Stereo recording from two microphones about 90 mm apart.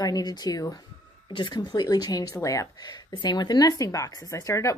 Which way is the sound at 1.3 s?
55° left (ahead or behind).